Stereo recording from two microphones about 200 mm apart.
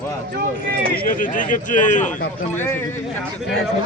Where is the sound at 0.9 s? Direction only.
45° left (ahead or behind).